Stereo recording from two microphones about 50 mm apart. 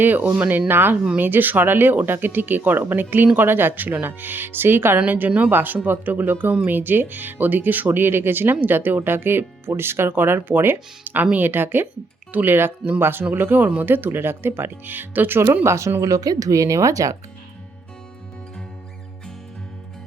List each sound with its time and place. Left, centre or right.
0.0 s speech: right
5.0 s speech: right
15.6 s speech: right
16.0 s speech: right